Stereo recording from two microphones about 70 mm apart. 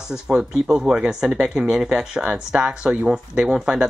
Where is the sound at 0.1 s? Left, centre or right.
Centre.